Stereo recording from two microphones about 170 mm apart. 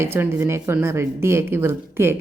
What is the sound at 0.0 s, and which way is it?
Speech, 15° right (ahead or behind).